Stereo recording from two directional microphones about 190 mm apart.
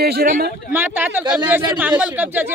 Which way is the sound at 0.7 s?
10° right (ahead or behind).